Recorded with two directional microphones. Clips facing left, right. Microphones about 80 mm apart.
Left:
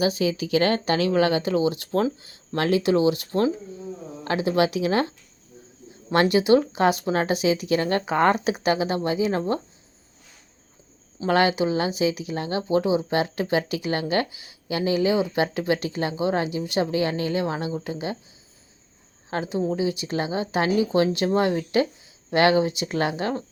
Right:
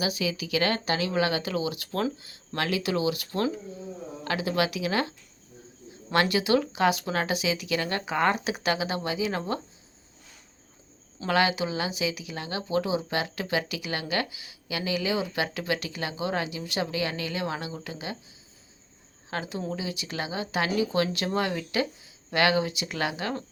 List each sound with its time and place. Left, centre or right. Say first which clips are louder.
0.0 s speech: left 6 dB; left
6.1 s speech: left 5 dB; left
11.3 s speech: left 5 dB; left
19.3 s speech: left 7 dB; left